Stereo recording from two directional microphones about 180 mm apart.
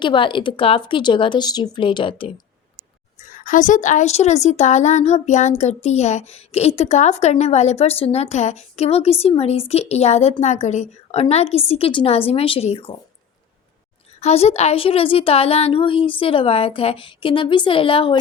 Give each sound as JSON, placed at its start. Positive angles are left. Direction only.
{"t": 0.0, "sound": "speech", "side_deg": 25}
{"t": 3.2, "sound": "a woman's voice", "side_deg": 50}
{"t": 14.2, "sound": "a woman's voice", "side_deg": 35}